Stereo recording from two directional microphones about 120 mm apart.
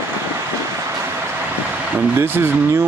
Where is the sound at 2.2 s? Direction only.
20° right (ahead or behind).